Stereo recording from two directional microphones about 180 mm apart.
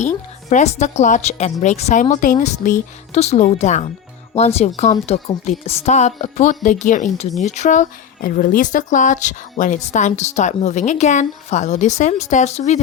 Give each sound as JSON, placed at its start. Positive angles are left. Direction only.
{"t": 0.5, "sound": "speech", "side_deg": 40}